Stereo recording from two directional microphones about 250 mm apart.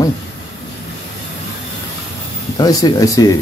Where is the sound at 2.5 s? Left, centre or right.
Centre.